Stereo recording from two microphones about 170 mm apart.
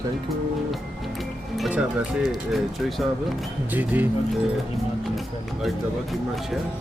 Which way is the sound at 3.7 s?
10° right (ahead or behind).